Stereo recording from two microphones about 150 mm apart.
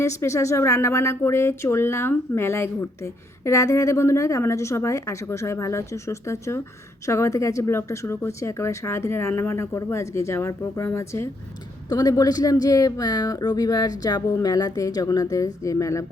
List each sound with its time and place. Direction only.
0.0 s speech: 20° left (ahead or behind)